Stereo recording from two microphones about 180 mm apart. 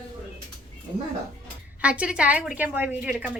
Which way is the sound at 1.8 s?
5° right (ahead or behind).